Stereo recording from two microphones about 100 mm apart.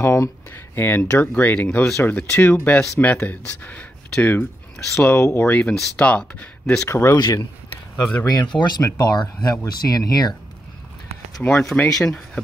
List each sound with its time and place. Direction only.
0.0 s speech: 30° left (ahead or behind)
4.9 s speech: 25° left (ahead or behind); by 6.9 s 5° left (ahead or behind)
6.9 s speech: 25° left (ahead or behind)
7.9 s speech: 15° left (ahead or behind)
8.3 s speech: 45° left (ahead or behind)
11.4 s speech: 10° left (ahead or behind)